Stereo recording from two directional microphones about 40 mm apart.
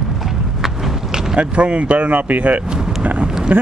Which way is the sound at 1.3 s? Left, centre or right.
Right.